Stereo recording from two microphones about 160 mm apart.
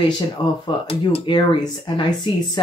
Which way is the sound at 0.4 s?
25° left (ahead or behind).